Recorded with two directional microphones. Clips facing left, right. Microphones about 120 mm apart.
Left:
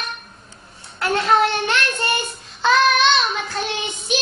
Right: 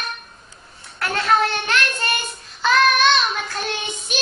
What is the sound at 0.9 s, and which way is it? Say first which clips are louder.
Child singing: left 2 dB; 20° left (ahead or behind).